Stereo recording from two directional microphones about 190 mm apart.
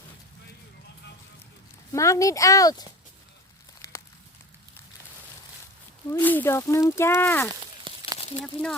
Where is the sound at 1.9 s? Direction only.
15° left (ahead or behind).